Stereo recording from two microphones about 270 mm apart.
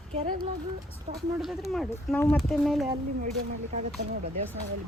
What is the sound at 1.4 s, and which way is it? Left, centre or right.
Speech, centre.